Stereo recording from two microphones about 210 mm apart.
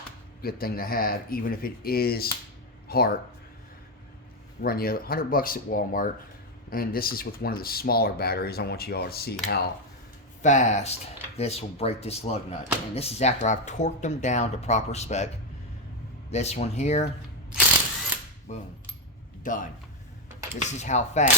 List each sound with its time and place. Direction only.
0.4 s speech: 45° left (ahead or behind)
4.6 s speech: 45° left (ahead or behind)
10.4 s speech: 35° left (ahead or behind)
16.3 s speech: 30° left (ahead or behind)
18.5 s speech: 35° left (ahead or behind)
20.6 s speech: 35° left (ahead or behind)